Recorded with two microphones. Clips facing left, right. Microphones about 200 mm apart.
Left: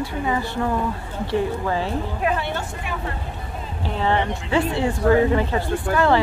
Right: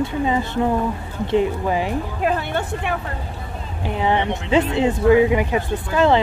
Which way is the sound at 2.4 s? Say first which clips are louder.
Right 3 dB; 60° right (ahead or behind).